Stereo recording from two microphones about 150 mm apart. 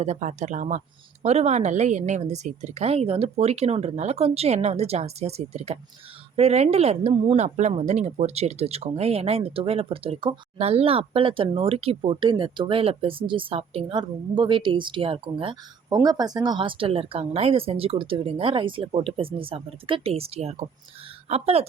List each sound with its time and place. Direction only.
0.0 s a woman's voice: 55° right (ahead or behind)